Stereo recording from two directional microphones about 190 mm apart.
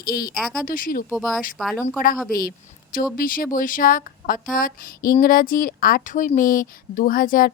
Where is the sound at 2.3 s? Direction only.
50° left (ahead or behind).